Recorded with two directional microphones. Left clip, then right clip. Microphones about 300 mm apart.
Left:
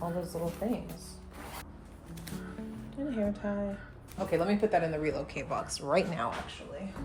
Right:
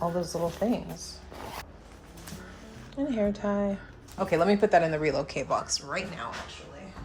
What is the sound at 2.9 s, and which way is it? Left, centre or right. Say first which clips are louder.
Speech: right 6 dB; right.